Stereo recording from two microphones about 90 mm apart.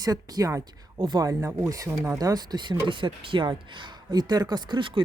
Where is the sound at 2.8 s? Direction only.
65° right (ahead or behind).